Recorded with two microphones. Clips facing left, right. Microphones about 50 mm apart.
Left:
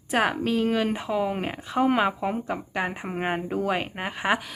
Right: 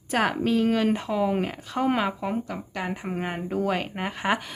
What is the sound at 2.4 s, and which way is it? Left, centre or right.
Speech, left.